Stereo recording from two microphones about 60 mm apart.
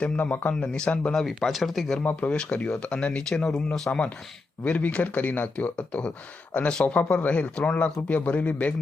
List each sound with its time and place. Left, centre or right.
0.0 s speech: left
1.1 s speech: centre
2.0 s speech: left
4.6 s speech: left